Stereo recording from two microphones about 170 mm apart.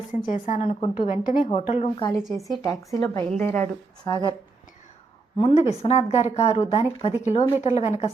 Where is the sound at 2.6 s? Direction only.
20° left (ahead or behind).